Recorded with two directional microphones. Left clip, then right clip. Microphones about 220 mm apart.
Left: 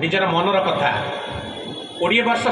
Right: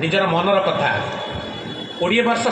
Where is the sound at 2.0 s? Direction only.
50° right (ahead or behind).